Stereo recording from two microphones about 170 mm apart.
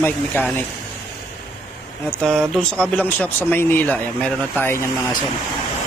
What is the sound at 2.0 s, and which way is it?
Speech, 5° left (ahead or behind).